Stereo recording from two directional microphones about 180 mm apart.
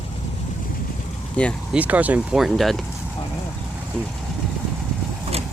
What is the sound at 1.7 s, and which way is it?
Speech, 10° right (ahead or behind).